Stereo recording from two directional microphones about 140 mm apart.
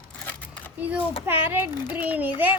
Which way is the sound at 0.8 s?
10° right (ahead or behind).